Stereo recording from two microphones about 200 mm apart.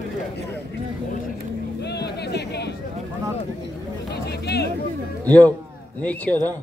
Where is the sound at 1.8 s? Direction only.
55° left (ahead or behind).